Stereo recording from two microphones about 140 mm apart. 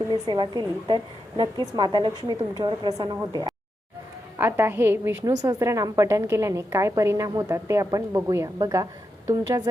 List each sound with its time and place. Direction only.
0.1 s a woman's voice: 30° right (ahead or behind)
4.4 s a woman's voice: 15° right (ahead or behind)